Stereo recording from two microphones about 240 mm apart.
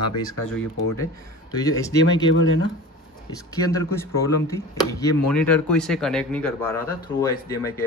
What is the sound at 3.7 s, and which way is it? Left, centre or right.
Speech, centre.